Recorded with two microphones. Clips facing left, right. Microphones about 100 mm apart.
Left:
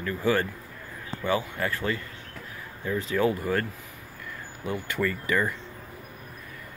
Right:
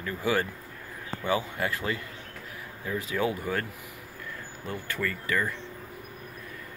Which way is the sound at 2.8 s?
5° right (ahead or behind).